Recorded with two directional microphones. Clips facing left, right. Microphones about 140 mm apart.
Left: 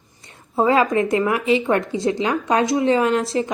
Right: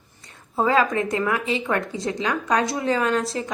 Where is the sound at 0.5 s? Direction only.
25° left (ahead or behind).